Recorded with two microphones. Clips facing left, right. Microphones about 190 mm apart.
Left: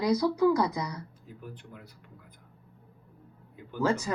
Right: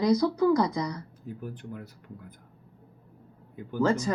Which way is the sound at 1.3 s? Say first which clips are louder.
Right 9 dB; 50° right (ahead or behind).